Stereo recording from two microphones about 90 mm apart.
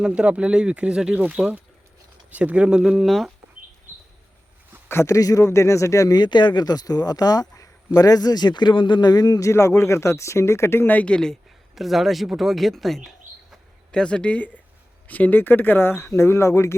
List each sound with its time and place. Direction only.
0.0 s speech: 10° right (ahead or behind)
4.9 s speech: 30° left (ahead or behind)
6.1 s speech: 55° left (ahead or behind); by 16.7 s 35° left (ahead or behind)